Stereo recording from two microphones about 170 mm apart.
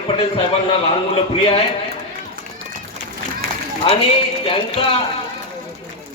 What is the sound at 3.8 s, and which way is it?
A man's voice, 30° left (ahead or behind).